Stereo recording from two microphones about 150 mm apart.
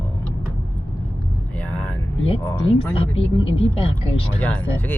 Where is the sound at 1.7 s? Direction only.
10° left (ahead or behind).